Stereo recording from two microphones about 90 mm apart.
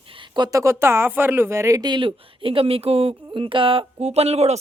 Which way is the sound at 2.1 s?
80° right.